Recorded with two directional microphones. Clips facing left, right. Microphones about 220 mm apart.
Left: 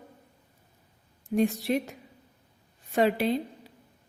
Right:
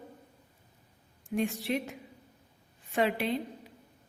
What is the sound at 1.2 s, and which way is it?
Speech, 40° left (ahead or behind).